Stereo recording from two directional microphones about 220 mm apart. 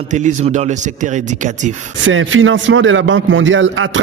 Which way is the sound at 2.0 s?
60° right (ahead or behind).